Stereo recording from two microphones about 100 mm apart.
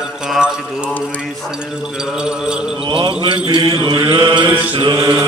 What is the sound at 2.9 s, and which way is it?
Mantra, 55° right (ahead or behind).